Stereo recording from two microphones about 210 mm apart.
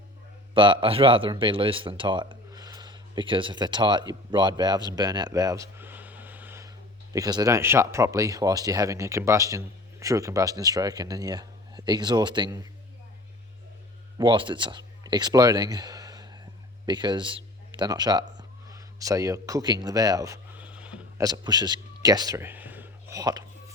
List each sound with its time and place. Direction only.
0.5 s speech: 25° right (ahead or behind)
14.2 s a man's voice: 20° right (ahead or behind); by 21.0 s 5° right (ahead or behind)
21.2 s a sound: 20° right (ahead or behind)